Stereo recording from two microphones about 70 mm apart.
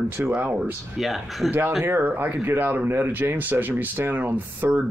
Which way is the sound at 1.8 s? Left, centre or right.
Right.